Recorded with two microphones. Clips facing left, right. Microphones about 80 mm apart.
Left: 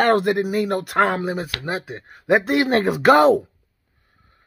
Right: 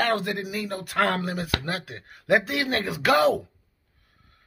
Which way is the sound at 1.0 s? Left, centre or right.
Left.